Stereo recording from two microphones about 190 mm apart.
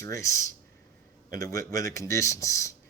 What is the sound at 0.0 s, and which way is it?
Speech, 15° left (ahead or behind).